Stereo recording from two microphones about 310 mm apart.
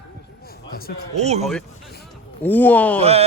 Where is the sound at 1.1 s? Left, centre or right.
Right.